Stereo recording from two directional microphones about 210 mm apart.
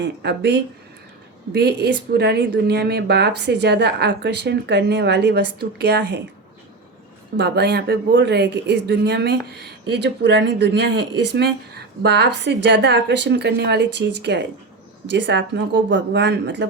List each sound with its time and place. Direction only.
0.0 s a woman's voice: 55° right (ahead or behind)
7.3 s a woman's voice: 50° right (ahead or behind)